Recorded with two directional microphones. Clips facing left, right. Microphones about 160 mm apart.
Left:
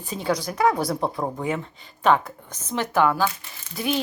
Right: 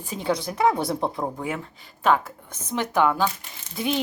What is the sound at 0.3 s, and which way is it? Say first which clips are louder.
Speech: even; 25° right (ahead or behind).